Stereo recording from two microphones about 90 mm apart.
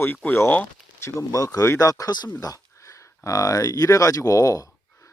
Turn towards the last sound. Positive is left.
turn(degrees=40)  # may be behind; listen again after turning